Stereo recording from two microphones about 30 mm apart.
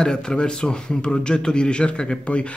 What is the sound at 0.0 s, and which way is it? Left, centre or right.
A man's voice, left.